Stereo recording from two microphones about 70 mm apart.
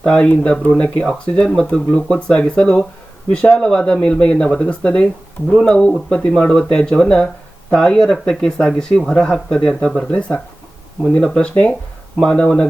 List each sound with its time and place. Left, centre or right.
0.1 s speech: centre